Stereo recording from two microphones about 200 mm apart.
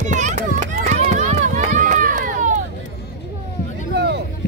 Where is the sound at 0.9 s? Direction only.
35° right (ahead or behind).